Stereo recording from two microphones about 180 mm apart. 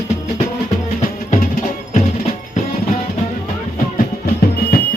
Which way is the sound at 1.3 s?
50° left (ahead or behind).